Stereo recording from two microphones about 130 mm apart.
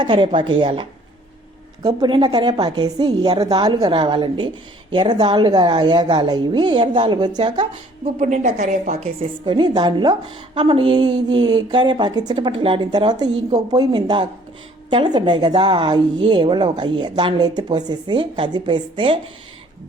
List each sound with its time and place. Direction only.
0.0 s a woman's voice: 40° right (ahead or behind)
8.0 s a woman's voice: 70° right (ahead or behind)
9.0 s a woman's voice: 40° right (ahead or behind)